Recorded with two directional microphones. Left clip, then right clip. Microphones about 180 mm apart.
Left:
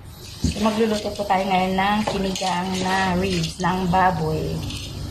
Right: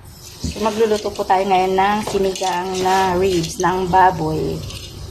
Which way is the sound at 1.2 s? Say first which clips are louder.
Right 5 dB; 50° right (ahead or behind).